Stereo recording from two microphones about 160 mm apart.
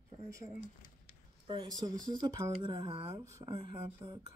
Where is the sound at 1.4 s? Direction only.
30° right (ahead or behind).